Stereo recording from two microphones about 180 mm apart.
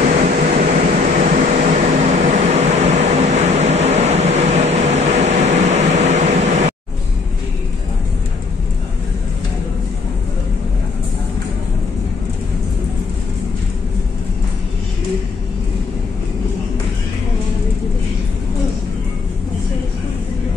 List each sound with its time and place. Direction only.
0.1 s vehicle: 45° right (ahead or behind)